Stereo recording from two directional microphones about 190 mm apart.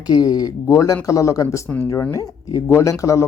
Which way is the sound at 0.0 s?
20° left (ahead or behind).